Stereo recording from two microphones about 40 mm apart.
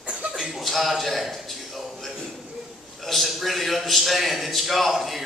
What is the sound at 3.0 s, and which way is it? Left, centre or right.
A man's voice, centre.